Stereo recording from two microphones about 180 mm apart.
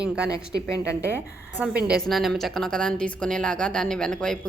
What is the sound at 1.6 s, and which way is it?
Speech, 5° right (ahead or behind).